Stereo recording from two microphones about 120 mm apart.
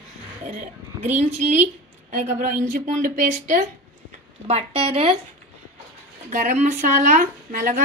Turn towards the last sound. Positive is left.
turn(degrees=-90)